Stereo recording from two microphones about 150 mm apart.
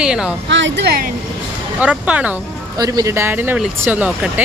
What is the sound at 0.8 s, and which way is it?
Speech, 90° right.